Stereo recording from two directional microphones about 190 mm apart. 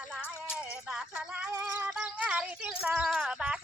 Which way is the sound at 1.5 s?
15° right (ahead or behind).